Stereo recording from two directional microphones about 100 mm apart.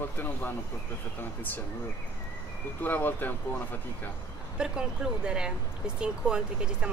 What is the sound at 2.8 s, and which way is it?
Speech, 20° left (ahead or behind).